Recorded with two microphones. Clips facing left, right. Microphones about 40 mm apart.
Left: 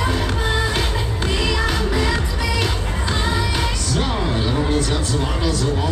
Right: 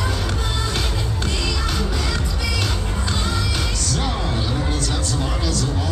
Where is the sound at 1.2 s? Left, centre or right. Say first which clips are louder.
Left 6 dB; centre.